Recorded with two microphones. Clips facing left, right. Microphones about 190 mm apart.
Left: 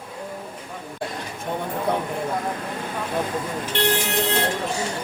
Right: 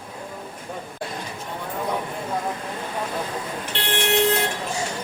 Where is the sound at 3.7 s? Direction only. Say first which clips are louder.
Left 11 dB; 45° left (ahead or behind).